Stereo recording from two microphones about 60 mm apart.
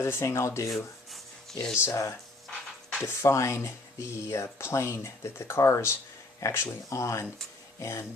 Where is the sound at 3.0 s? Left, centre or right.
Left.